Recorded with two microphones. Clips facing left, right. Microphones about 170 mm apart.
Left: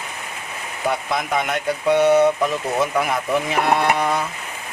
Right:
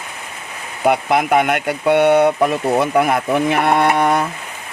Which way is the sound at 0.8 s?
65° right (ahead or behind).